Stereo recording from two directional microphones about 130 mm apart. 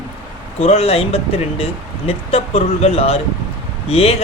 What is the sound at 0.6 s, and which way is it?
Speech, 50° left (ahead or behind).